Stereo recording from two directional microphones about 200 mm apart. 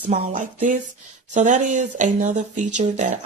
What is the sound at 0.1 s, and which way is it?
Speech, 40° right (ahead or behind).